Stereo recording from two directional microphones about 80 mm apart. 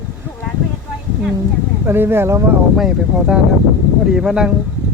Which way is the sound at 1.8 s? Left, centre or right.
Right.